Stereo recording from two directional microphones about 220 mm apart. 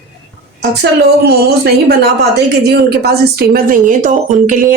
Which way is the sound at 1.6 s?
45° right (ahead or behind).